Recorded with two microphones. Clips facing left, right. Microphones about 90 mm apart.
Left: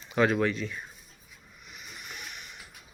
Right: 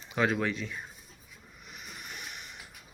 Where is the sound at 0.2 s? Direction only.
5° right (ahead or behind).